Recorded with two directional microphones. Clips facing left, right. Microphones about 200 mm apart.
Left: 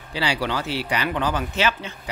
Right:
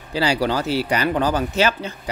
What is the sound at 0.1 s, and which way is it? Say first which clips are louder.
Speech: right 5 dB; 40° right (ahead or behind).